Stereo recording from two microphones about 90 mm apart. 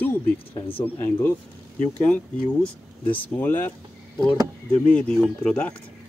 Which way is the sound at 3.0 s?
20° left (ahead or behind).